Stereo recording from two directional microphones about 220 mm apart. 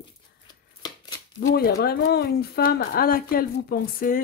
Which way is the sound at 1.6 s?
45° left (ahead or behind).